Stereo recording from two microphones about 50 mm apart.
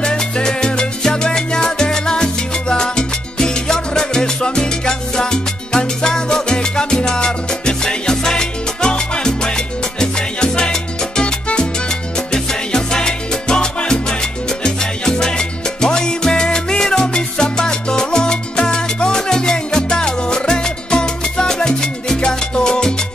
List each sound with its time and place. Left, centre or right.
0.0 s salsa music: centre